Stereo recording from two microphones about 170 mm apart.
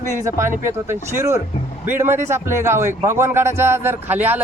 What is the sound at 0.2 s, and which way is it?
A man's voice, 15° right (ahead or behind).